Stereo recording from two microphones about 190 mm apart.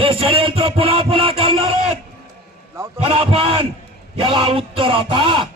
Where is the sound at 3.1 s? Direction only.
30° right (ahead or behind).